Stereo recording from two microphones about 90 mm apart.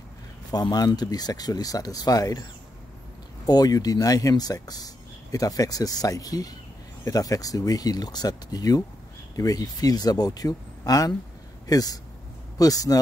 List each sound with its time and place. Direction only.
0.5 s speech: 50° left (ahead or behind)
3.4 s speech: 45° left (ahead or behind)